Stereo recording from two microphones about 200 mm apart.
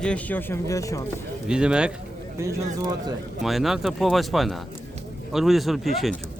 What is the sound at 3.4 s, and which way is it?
Speech, centre (ahead or behind).